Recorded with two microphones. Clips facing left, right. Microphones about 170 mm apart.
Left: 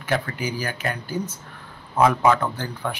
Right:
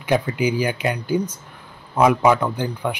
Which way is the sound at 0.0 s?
15° right (ahead or behind).